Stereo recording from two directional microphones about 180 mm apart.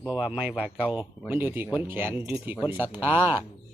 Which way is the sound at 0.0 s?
5° right (ahead or behind).